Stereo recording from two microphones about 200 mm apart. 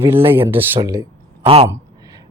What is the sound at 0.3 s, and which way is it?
Speech, 10° right (ahead or behind).